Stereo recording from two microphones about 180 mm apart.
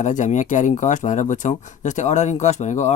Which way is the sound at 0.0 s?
45° left (ahead or behind).